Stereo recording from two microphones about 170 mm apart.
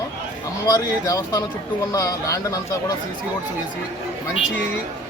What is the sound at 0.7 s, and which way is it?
Speech, 20° left (ahead or behind).